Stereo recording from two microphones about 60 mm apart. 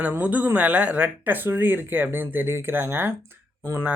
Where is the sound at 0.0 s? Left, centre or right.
Right.